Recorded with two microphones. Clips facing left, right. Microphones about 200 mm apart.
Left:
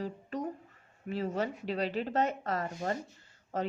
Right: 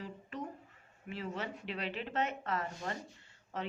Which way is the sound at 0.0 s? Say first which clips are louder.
Left 7 dB; 40° left (ahead or behind).